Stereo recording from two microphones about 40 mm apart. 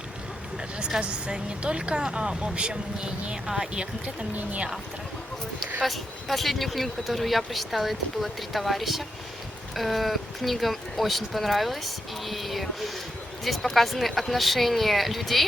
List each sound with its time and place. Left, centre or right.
0.8 s a sound: centre
1.0 s speech: right
5.8 s speech: centre